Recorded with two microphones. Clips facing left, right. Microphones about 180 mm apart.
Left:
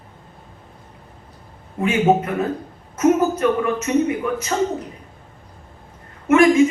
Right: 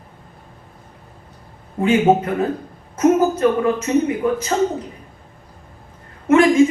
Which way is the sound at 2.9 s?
30° right (ahead or behind).